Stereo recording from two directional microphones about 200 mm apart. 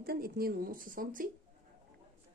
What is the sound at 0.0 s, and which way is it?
Speech, 45° right (ahead or behind).